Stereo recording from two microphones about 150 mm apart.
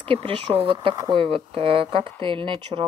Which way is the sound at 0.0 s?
40° right (ahead or behind).